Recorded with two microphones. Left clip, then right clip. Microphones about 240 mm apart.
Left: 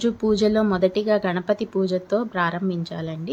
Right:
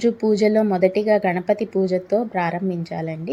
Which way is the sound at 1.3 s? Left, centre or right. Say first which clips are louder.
Right 3 dB; left.